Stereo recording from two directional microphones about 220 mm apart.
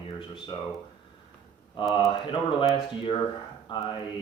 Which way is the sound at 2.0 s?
20° left (ahead or behind).